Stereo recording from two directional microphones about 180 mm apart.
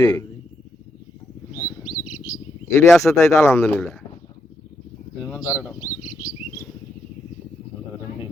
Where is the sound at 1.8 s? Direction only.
50° left (ahead or behind).